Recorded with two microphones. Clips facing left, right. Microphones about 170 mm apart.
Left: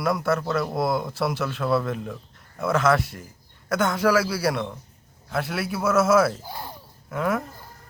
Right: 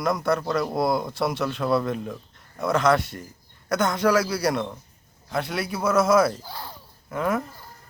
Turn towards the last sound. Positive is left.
turn(degrees=5)  # may be behind; listen again after turning